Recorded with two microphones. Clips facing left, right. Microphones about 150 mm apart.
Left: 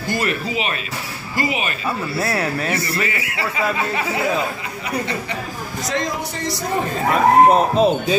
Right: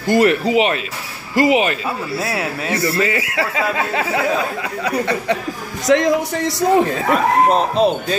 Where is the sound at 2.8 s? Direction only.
90° right.